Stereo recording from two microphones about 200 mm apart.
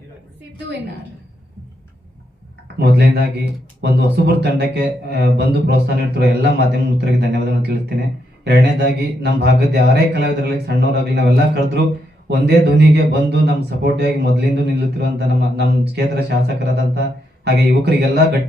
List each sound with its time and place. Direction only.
2.7 s a man's voice: 55° right (ahead or behind)